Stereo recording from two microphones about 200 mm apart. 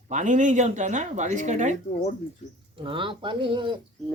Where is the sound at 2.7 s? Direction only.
25° right (ahead or behind).